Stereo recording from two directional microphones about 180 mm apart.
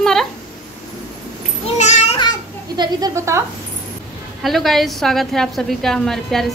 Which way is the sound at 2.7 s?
20° right (ahead or behind).